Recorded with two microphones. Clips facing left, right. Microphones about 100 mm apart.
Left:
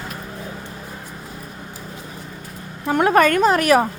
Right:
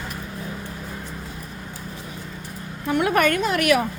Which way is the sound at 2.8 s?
40° left (ahead or behind).